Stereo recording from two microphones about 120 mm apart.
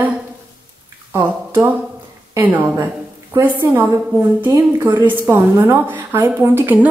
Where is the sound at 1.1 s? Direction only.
20° right (ahead or behind).